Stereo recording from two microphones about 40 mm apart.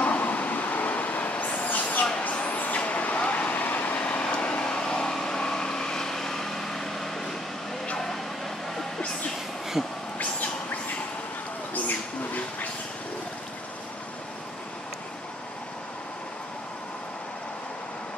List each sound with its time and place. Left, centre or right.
0.0 s vehicle: left
4.0 s vehicle: left; by 7.3 s centre
9.8 s speech: centre
10.1 s bird: left